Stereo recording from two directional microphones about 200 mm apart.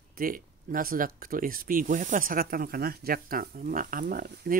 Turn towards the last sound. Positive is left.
turn(degrees=-45)  # may be behind; listen again after turning